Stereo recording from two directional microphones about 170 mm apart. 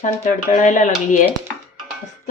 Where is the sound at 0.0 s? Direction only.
45° left (ahead or behind).